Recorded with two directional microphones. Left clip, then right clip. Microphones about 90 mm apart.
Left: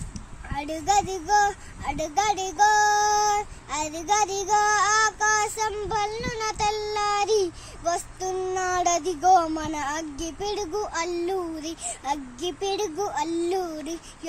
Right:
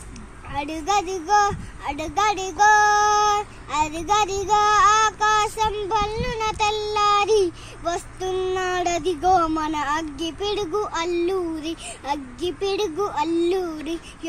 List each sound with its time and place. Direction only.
0.5 s a child's voice: 40° left (ahead or behind)